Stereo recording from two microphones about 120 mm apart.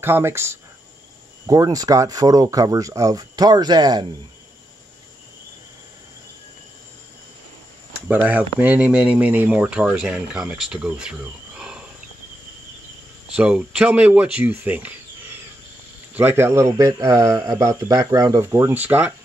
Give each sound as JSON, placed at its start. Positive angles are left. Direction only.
{"t": 0.0, "sound": "speech", "side_deg": -20}
{"t": 8.1, "sound": "speech", "side_deg": -15}
{"t": 13.4, "sound": "speech", "side_deg": -10}
{"t": 16.2, "sound": "speech", "side_deg": -20}